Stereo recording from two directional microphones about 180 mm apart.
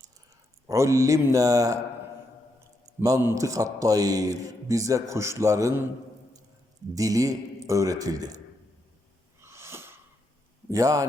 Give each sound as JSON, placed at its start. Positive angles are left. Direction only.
{"t": 0.7, "sound": "a man's voice", "side_deg": -15}
{"t": 3.0, "sound": "a man's voice", "side_deg": -15}
{"t": 6.9, "sound": "a man's voice", "side_deg": -20}
{"t": 9.4, "sound": "wheeze", "side_deg": -15}
{"t": 10.7, "sound": "a man's voice", "side_deg": -20}